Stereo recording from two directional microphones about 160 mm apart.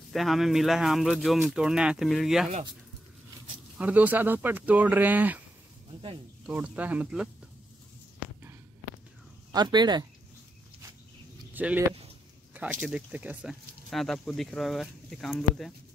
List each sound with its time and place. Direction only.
0.1 s speech: centre (ahead or behind)
3.7 s speech: 10° right (ahead or behind)
6.4 s speech: 10° right (ahead or behind)
9.5 s speech: 25° right (ahead or behind)
11.5 s speech: 10° right (ahead or behind)
12.8 s speech: 5° right (ahead or behind)